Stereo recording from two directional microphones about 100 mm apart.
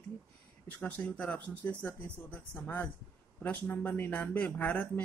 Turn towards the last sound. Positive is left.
turn(degrees=15)  # may be behind; listen again after turning